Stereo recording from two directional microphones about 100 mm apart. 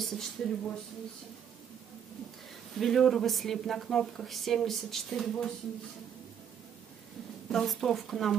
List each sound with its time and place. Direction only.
0.0 s speech: 5° left (ahead or behind)
2.7 s speech: 5° left (ahead or behind)
7.4 s speech: 5° left (ahead or behind)